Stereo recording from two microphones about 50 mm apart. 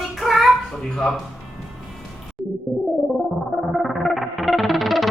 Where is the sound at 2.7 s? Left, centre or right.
Centre.